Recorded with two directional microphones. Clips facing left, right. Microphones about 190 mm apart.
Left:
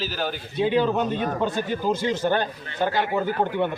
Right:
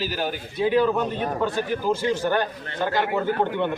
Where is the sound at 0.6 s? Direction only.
20° left (ahead or behind).